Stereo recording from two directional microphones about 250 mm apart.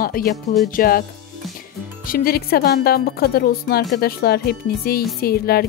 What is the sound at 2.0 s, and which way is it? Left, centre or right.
Speech, left.